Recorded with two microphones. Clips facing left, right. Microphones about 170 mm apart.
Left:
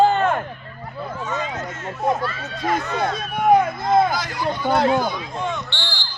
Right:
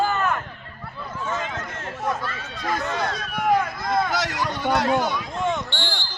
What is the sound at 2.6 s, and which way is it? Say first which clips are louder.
Speech: left 3 dB; 25° left (ahead or behind).